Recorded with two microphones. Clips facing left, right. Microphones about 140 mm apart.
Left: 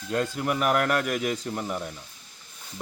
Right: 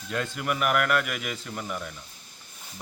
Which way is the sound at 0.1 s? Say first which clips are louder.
Left 3 dB; 35° left (ahead or behind).